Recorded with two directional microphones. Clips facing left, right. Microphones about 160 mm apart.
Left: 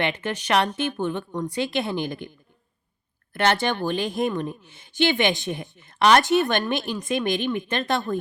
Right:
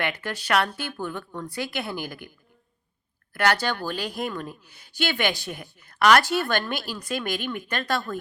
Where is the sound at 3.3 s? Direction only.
25° left (ahead or behind).